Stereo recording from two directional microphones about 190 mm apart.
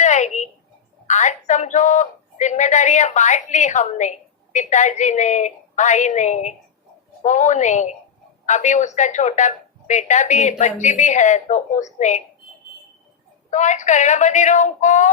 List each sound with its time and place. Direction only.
0.0 s a sound: 40° left (ahead or behind)
1.0 s a woman's voice: 40° left (ahead or behind)
13.5 s a woman's voice: 40° left (ahead or behind)